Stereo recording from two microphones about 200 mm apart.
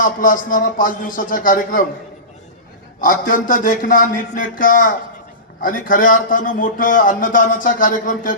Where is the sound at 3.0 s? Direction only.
45° left (ahead or behind).